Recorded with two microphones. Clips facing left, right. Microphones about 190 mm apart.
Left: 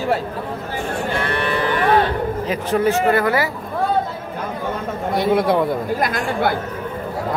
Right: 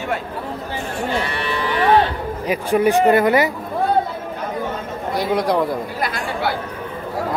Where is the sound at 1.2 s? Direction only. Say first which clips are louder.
Left 3 dB; 55° left (ahead or behind).